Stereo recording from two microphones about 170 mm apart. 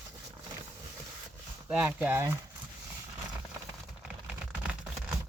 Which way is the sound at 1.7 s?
10° right (ahead or behind).